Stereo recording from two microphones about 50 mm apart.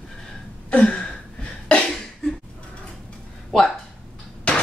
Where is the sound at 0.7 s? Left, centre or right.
Left.